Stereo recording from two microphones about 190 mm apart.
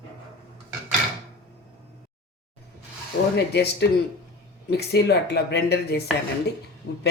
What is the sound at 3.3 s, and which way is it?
Speech, 60° left (ahead or behind).